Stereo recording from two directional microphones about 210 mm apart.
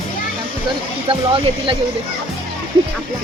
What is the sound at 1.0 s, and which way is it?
Speech, 25° right (ahead or behind).